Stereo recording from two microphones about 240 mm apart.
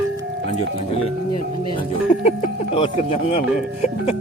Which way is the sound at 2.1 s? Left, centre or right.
Left.